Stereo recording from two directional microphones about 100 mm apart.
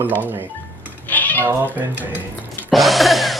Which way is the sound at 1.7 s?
15° right (ahead or behind).